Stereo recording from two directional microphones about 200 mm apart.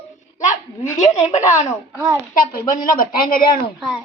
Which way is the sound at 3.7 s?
Centre (ahead or behind).